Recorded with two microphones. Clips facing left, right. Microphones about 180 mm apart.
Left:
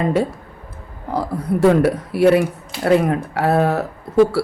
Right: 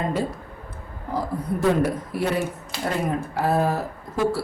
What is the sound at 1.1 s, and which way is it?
A woman's voice, 75° left (ahead or behind).